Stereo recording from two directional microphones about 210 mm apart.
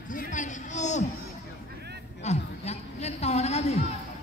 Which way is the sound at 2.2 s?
30° left (ahead or behind).